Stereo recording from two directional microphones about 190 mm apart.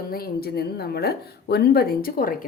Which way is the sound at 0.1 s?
50° left (ahead or behind).